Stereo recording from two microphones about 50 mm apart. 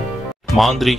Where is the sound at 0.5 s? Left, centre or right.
Centre.